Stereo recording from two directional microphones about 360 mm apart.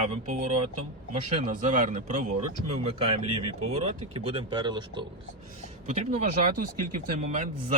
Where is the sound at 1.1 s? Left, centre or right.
Right.